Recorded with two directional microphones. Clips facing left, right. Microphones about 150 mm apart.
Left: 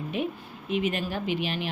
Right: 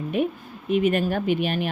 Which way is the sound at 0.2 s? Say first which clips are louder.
Right 7 dB; 50° right (ahead or behind).